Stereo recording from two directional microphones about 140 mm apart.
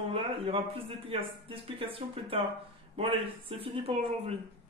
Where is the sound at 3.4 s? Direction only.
40° right (ahead or behind).